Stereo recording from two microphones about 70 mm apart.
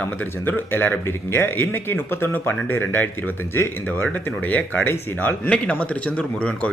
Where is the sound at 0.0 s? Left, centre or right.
Left.